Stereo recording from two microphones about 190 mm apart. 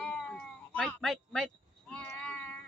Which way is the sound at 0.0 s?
5° left (ahead or behind).